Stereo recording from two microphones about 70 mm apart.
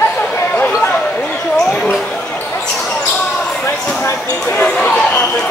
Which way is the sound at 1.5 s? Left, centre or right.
Centre.